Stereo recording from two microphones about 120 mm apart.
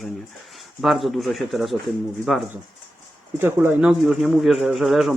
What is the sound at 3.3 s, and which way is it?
Speech, 20° right (ahead or behind).